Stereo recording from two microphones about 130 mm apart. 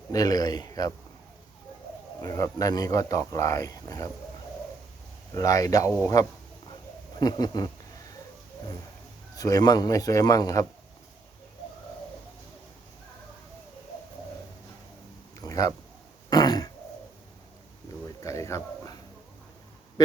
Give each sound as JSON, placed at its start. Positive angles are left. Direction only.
{"t": 0.1, "sound": "speech", "side_deg": 30}
{"t": 2.2, "sound": "speech", "side_deg": 25}
{"t": 5.3, "sound": "speech", "side_deg": 25}
{"t": 9.3, "sound": "speech", "side_deg": 30}
{"t": 15.4, "sound": "a sound", "side_deg": 30}
{"t": 16.3, "sound": "throat clearing", "side_deg": 30}
{"t": 18.2, "sound": "speech", "side_deg": 25}